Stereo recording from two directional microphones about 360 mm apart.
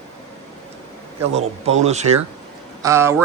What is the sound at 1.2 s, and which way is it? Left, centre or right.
Speech, centre.